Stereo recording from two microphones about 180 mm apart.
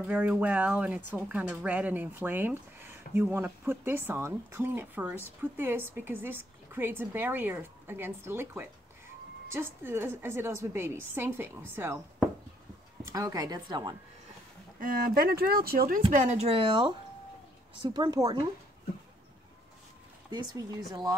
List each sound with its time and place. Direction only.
0.0 s a woman's voice: 10° right (ahead or behind)
14.8 s speech: 50° right (ahead or behind)
16.1 s a woman's voice: 40° right (ahead or behind); by 18.4 s 20° right (ahead or behind)
20.2 s a woman's voice: 25° right (ahead or behind)